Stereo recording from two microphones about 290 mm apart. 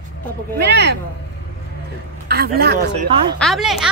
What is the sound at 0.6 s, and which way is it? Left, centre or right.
Speech, right.